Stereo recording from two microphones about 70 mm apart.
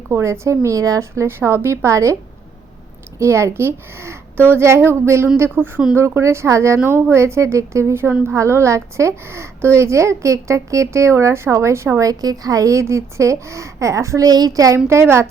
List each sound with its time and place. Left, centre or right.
0.1 s a woman's voice: right
1.4 s a woman's voice: right
3.2 s a woman's voice: right
12.0 s a woman's voice: right
14.3 s speech: right
14.8 s a woman's voice: right